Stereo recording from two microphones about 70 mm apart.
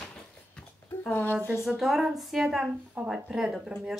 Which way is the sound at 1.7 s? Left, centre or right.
Centre.